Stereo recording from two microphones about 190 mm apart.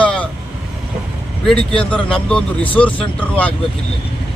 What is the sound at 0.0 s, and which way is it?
Vehicle, 5° left (ahead or behind).